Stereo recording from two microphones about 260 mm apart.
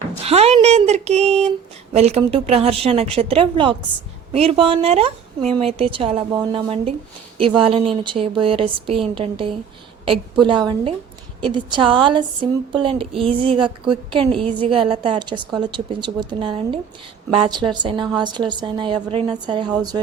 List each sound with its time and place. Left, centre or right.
0.3 s a woman's voice: right